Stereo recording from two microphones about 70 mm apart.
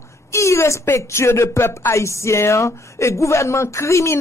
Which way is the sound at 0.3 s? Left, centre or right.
Left.